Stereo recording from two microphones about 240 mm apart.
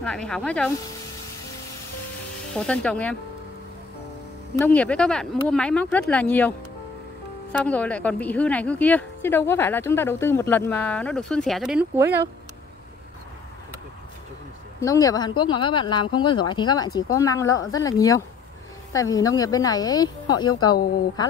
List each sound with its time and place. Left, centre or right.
0.0 s speech: centre
2.5 s speech: centre
4.6 s speech: centre
7.6 s speech: centre
14.8 s speech: centre